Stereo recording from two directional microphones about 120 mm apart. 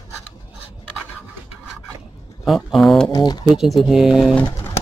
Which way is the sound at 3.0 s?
35° left (ahead or behind).